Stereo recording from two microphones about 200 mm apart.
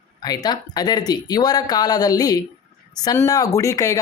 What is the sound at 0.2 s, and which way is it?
Speech, 20° left (ahead or behind).